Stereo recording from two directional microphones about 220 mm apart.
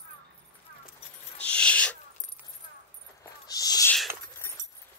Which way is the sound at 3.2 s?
15° left (ahead or behind).